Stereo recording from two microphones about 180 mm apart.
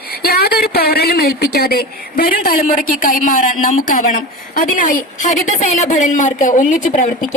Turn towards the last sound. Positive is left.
turn(degrees=45)  # may be behind; listen again after turning